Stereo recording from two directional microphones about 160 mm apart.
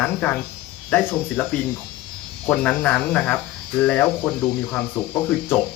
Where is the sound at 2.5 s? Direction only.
10° left (ahead or behind).